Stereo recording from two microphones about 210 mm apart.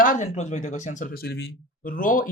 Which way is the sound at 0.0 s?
35° left (ahead or behind).